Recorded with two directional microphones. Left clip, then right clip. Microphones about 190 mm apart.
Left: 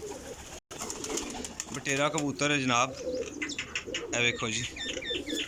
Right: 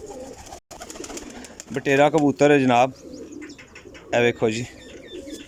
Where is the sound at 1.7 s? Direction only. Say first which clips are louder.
Right 12 dB; 55° right (ahead or behind).